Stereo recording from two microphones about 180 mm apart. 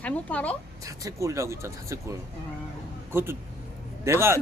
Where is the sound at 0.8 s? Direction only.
20° right (ahead or behind).